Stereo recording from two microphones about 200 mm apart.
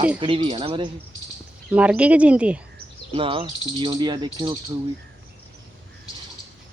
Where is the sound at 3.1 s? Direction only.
25° right (ahead or behind).